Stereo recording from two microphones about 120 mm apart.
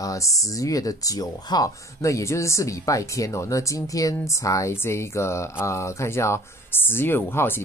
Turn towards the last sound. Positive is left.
turn(degrees=20)  # may be behind; listen again after turning